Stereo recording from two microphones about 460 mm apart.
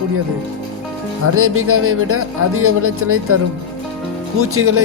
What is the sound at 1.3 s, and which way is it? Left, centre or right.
Music, right.